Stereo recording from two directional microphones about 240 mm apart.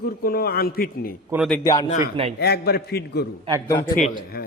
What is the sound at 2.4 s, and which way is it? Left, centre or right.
Speech, left.